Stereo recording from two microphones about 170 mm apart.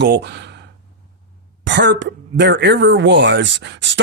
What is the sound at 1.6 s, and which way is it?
Speech, 90° right.